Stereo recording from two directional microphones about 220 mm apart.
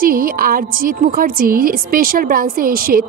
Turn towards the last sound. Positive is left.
turn(degrees=-40)  # may be behind; listen again after turning